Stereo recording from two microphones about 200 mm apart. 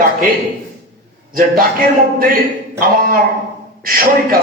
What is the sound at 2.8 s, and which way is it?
A man's voice, 45° right (ahead or behind).